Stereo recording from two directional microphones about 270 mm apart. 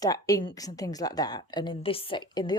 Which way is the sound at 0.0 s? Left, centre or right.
Centre.